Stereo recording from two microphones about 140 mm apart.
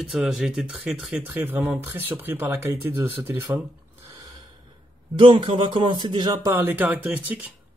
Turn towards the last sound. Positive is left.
turn(degrees=-10)  # may be behind; listen again after turning